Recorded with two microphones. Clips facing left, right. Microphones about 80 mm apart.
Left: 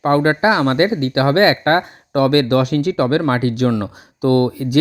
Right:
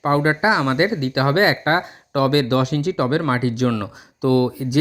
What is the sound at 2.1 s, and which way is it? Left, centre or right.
Speech, left.